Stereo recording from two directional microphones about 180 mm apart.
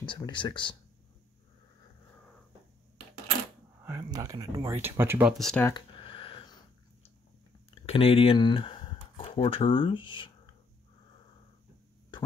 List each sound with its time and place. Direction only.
0.0 s speech: 25° left (ahead or behind)
3.8 s speech: 15° right (ahead or behind)
5.4 s speech: 5° left (ahead or behind)
5.7 s a sound: 25° left (ahead or behind)
7.7 s speech: 30° left (ahead or behind)